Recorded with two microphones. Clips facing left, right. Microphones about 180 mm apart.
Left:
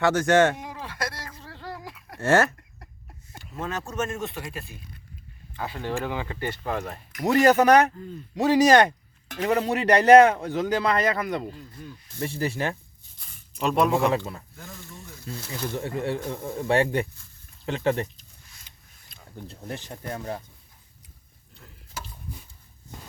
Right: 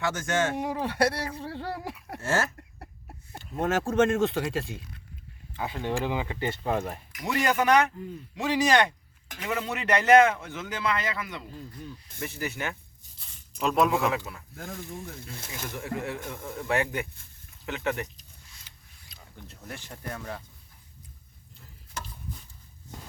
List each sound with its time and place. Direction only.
0.0 s speech: 65° left (ahead or behind)
0.6 s speech: 60° right (ahead or behind)
2.2 s speech: 65° left (ahead or behind)
3.9 s speech: 90° right
5.5 s speech: 15° right (ahead or behind)
7.2 s a man's voice: 40° left (ahead or behind)
12.2 s a man's voice: 30° left (ahead or behind)
13.6 s speech: centre (ahead or behind)
14.5 s speech: 60° right (ahead or behind)
15.7 s a man's voice: 30° left (ahead or behind)
19.4 s a man's voice: 30° left (ahead or behind)